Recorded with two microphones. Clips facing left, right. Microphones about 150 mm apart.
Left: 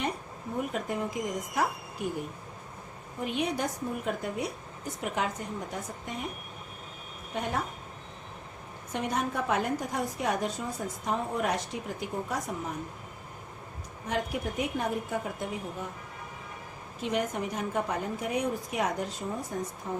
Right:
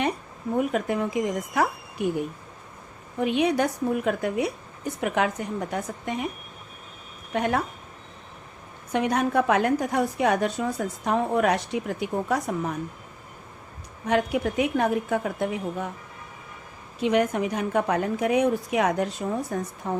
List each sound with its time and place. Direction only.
0.5 s a woman's voice: 85° right
3.2 s a woman's voice: 80° right
7.3 s a woman's voice: 80° right
8.9 s a woman's voice: 75° right (ahead or behind)
14.1 s a woman's voice: 80° right
17.0 s a woman's voice: 85° right; by 19.9 s 70° right (ahead or behind)